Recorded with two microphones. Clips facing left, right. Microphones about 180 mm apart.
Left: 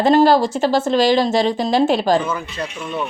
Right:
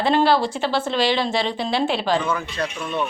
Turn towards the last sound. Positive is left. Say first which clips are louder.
# even
turn(degrees=5)  # may be behind; listen again after turning